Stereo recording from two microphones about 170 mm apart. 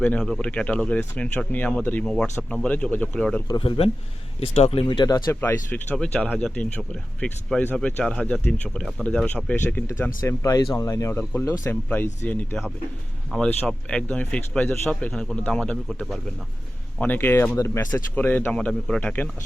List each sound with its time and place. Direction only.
0.0 s speech: 10° left (ahead or behind)
3.5 s speech: 30° left (ahead or behind); by 19.3 s 10° left (ahead or behind)